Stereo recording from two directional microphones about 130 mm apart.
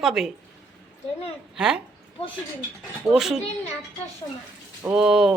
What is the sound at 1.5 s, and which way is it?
Speech, 5° right (ahead or behind).